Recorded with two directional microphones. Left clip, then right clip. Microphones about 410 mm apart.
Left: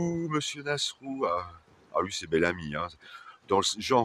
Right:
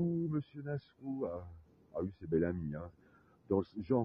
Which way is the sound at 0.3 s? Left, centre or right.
Right.